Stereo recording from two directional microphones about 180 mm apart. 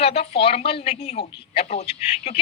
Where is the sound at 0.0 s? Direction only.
35° left (ahead or behind).